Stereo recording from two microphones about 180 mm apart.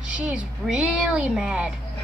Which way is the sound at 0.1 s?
5° right (ahead or behind).